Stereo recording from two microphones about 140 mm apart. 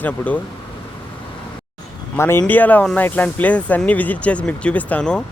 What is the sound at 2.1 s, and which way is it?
Speech, 15° left (ahead or behind).